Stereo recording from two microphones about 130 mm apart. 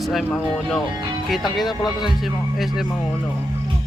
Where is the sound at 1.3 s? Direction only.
Centre (ahead or behind).